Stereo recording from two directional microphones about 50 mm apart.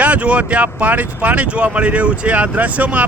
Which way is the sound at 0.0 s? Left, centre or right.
Right.